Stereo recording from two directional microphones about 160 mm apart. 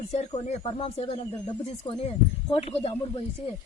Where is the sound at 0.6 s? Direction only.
35° left (ahead or behind).